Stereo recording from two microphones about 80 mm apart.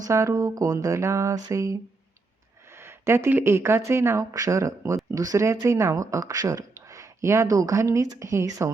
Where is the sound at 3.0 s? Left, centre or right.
Right.